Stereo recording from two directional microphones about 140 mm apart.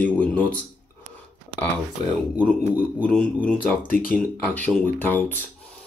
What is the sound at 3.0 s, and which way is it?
Speech, 5° left (ahead or behind).